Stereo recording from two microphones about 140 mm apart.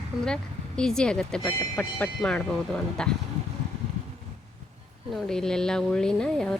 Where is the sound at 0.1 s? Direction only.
Centre (ahead or behind).